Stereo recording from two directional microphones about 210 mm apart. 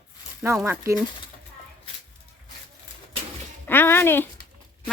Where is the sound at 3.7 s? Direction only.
10° left (ahead or behind).